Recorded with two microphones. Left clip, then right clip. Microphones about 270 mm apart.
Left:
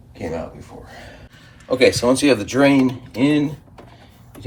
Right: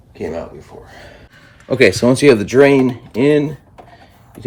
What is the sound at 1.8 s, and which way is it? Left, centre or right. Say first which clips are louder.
Speech: right 4 dB; right.